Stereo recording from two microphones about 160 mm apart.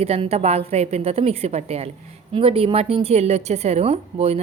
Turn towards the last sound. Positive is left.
turn(degrees=-40)  # may be behind; listen again after turning